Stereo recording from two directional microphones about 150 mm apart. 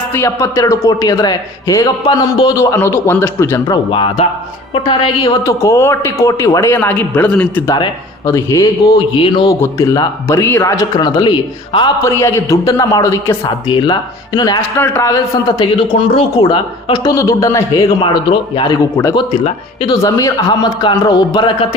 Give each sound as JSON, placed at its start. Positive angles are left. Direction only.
{"t": 0.1, "sound": "speech", "side_deg": 20}
{"t": 3.9, "sound": "a woman's voice", "side_deg": 35}
{"t": 5.5, "sound": "a man's voice", "side_deg": 20}
{"t": 8.3, "sound": "speech", "side_deg": 20}
{"t": 9.1, "sound": "a woman's voice", "side_deg": 35}
{"t": 9.5, "sound": "speech", "side_deg": 20}
{"t": 12.0, "sound": "speech", "side_deg": 20}
{"t": 16.0, "sound": "speech", "side_deg": 35}